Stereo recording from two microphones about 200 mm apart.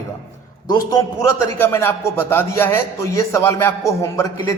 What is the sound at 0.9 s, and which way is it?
A man's voice, 15° left (ahead or behind).